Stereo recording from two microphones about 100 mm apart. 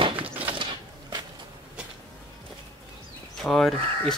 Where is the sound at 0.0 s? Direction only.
60° right (ahead or behind).